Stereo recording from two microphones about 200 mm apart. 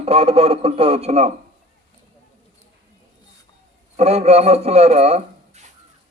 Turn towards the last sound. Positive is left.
turn(degrees=-35)  # may be behind; listen again after turning